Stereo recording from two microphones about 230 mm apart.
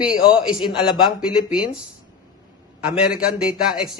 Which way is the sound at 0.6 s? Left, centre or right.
Left.